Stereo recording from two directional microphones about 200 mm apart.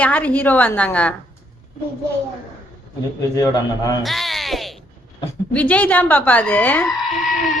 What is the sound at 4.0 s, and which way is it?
Music, centre (ahead or behind).